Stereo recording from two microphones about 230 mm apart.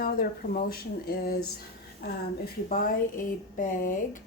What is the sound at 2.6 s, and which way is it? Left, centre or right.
Speech, left.